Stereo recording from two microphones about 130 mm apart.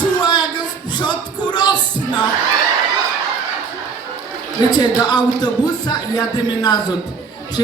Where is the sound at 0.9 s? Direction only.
35° left (ahead or behind).